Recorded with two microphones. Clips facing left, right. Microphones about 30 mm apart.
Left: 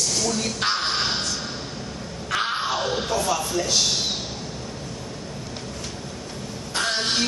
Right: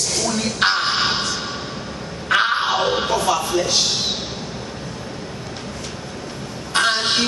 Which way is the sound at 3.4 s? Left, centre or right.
Right.